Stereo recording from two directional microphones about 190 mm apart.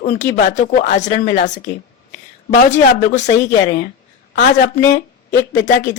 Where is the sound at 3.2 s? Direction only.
65° left (ahead or behind).